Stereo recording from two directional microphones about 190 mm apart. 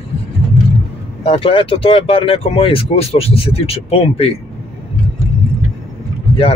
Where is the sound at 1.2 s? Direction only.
30° left (ahead or behind).